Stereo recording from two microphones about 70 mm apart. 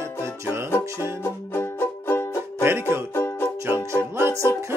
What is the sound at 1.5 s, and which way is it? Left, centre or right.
Music, left.